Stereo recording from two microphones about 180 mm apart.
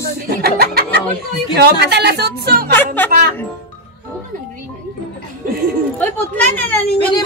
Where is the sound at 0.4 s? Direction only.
60° right (ahead or behind).